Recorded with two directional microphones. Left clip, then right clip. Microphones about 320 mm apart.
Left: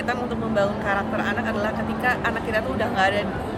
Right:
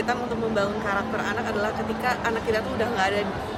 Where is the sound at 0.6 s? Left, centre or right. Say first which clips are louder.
Left 5 dB; centre.